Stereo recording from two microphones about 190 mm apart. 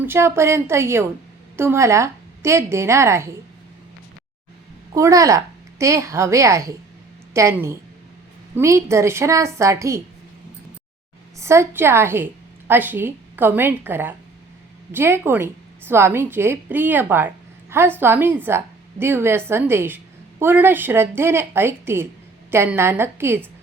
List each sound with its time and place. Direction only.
0.0 s a woman's voice: 15° right (ahead or behind)
4.9 s a woman's voice: 15° right (ahead or behind)
11.3 s a woman's voice: 15° right (ahead or behind)